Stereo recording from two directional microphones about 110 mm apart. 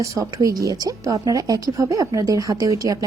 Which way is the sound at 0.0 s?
30° right (ahead or behind).